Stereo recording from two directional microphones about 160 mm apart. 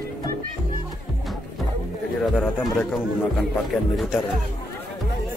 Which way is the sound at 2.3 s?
5° left (ahead or behind).